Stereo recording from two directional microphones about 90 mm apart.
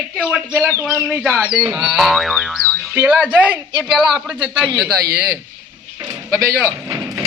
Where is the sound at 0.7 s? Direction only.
25° right (ahead or behind).